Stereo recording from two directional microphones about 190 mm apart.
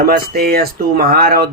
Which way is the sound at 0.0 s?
55° right (ahead or behind).